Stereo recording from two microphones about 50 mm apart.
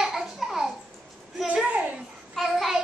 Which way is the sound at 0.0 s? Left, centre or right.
Centre.